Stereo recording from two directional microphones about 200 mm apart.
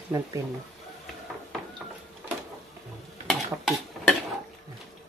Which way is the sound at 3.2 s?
Centre (ahead or behind).